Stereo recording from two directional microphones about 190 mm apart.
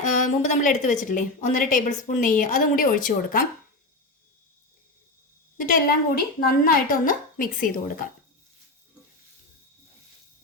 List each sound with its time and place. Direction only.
0.0 s a woman's voice: 40° left (ahead or behind)
5.5 s a woman's voice: 45° left (ahead or behind)